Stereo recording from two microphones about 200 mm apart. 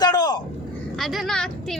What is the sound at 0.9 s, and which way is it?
Speech, centre (ahead or behind).